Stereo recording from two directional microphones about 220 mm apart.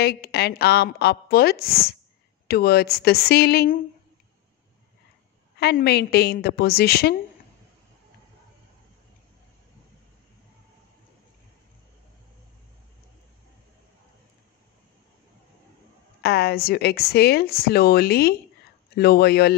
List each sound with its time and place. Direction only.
0.0 s a woman's voice: 45° left (ahead or behind)
5.6 s a woman's voice: 50° left (ahead or behind)
16.2 s a woman's voice: 45° left (ahead or behind)